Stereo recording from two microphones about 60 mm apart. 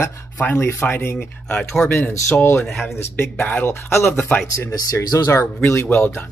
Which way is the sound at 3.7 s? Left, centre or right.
Left.